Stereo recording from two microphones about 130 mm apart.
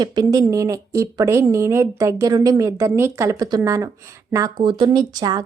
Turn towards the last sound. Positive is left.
turn(degrees=-30)  # may be behind; listen again after turning